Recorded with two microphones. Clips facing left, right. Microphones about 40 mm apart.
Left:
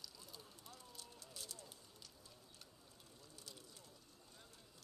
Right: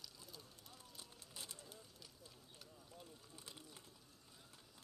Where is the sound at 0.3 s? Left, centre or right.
Centre.